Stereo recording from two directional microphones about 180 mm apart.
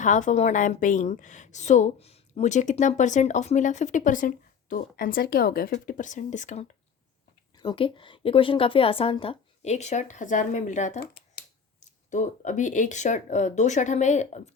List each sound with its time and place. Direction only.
0.0 s a woman's voice: 45° left (ahead or behind)
7.5 s a woman's voice: 25° left (ahead or behind); by 11.0 s 40° left (ahead or behind)
11.0 s a sound: 60° left (ahead or behind)
11.8 s a woman's voice: 40° left (ahead or behind)